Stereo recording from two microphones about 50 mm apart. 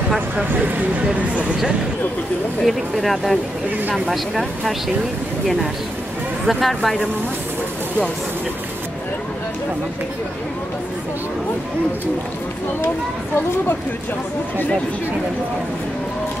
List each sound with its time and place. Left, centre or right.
0.5 s speech: right
2.6 s speech: centre
6.4 s speech: centre